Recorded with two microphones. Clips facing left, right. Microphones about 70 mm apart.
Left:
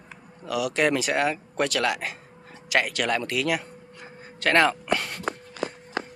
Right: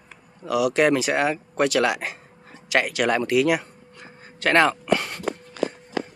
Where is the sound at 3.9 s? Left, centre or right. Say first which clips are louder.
Left 1 dB; centre.